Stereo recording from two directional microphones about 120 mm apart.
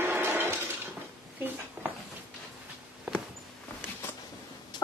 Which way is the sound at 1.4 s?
15° right (ahead or behind).